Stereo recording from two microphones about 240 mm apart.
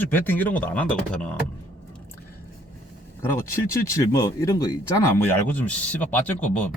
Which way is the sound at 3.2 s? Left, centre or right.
Centre.